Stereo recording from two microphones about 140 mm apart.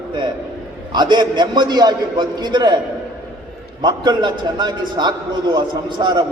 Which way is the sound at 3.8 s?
30° right (ahead or behind).